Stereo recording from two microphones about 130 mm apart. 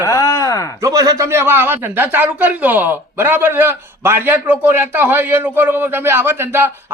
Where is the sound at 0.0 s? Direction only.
25° left (ahead or behind).